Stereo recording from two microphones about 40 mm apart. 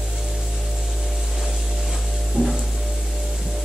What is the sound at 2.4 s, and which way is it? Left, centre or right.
Music, centre.